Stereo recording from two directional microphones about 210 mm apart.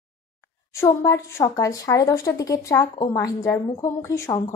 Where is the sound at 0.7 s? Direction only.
15° left (ahead or behind).